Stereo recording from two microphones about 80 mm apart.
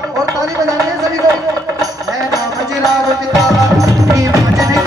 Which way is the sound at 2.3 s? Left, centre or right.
Right.